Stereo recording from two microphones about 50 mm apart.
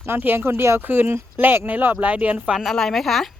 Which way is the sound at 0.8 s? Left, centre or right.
Right.